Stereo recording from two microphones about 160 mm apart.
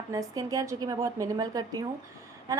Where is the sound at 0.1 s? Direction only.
20° right (ahead or behind).